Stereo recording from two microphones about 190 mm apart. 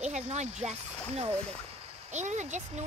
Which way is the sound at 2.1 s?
40° right (ahead or behind).